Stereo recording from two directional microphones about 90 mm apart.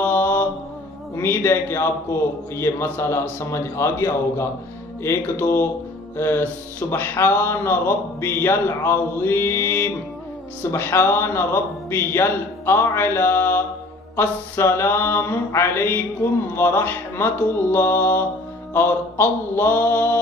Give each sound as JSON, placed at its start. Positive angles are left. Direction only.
{"t": 0.0, "sound": "mantra", "side_deg": 20}